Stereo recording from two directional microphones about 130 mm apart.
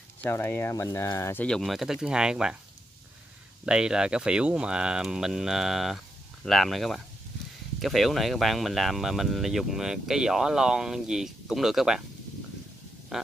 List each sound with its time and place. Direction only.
0.2 s speech: 15° left (ahead or behind)
1.4 s speech: 5° left (ahead or behind)
3.6 s speech: 5° right (ahead or behind)
13.1 s a sound: centre (ahead or behind)